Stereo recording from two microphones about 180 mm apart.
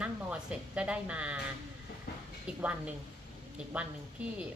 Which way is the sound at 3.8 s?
5° right (ahead or behind).